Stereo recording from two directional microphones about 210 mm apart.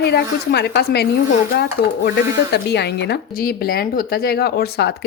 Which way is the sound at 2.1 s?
55° left (ahead or behind).